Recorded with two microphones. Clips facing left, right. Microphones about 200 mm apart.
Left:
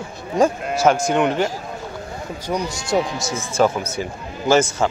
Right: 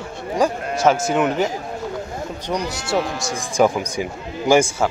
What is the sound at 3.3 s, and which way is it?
A man's voice, 15° right (ahead or behind).